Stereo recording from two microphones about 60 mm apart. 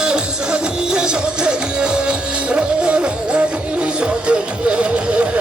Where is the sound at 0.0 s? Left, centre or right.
Centre.